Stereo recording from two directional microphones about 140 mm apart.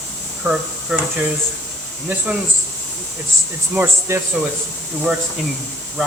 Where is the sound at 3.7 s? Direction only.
15° right (ahead or behind).